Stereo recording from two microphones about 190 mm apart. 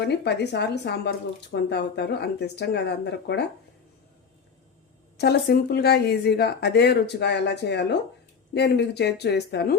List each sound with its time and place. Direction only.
0.0 s speech: 65° left (ahead or behind)
5.1 s speech: 60° left (ahead or behind)